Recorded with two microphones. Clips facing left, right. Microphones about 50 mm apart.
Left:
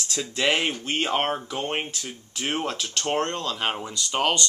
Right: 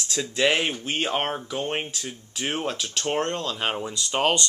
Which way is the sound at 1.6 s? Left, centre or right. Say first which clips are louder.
Even; centre.